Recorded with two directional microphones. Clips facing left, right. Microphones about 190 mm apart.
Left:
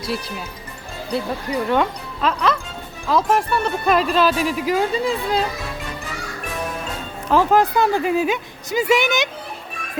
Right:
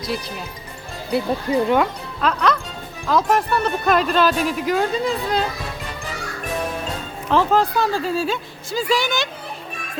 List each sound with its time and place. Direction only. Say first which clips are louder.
1.5 s speech: right 5 dB; 25° right (ahead or behind)
1.7 s speech: right 1 dB; centre (ahead or behind)
7.3 s a woman's voice: left 2 dB; 10° left (ahead or behind)